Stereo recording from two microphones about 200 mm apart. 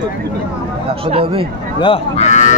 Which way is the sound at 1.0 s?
30° right (ahead or behind).